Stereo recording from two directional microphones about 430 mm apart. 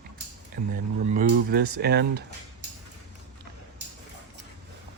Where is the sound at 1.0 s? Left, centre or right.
Right.